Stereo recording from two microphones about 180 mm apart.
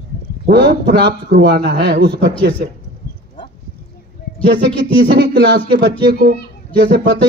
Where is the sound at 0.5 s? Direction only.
65° right (ahead or behind).